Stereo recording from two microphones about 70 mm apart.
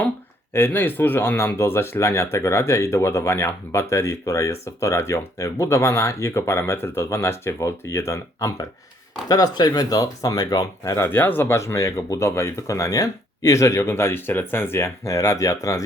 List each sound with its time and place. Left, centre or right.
0.5 s speech: left
9.3 s speech: left
10.8 s speech: left